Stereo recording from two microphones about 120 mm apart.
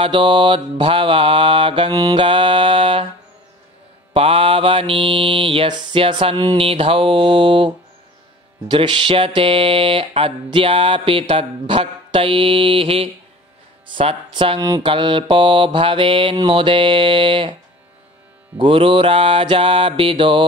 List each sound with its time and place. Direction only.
0.0 s music: 45° right (ahead or behind)
4.1 s music: 50° right (ahead or behind)
18.6 s music: 50° right (ahead or behind)